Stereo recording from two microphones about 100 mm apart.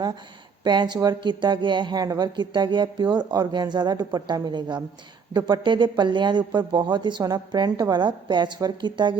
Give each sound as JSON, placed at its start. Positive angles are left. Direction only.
{"t": 0.6, "sound": "speech", "side_deg": -45}